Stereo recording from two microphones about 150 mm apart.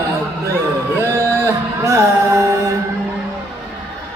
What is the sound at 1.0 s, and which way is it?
Music, 20° right (ahead or behind).